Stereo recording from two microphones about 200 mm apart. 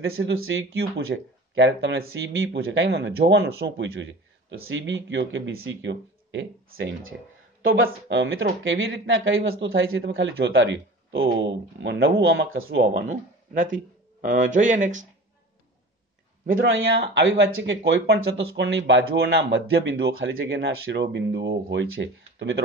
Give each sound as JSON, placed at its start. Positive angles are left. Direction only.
{"t": 0.0, "sound": "speech", "side_deg": -90}
{"t": 7.7, "sound": "speech", "side_deg": -70}
{"t": 12.9, "sound": "speech", "side_deg": -45}
{"t": 16.4, "sound": "speech", "side_deg": -45}
{"t": 17.3, "sound": "speech", "side_deg": -70}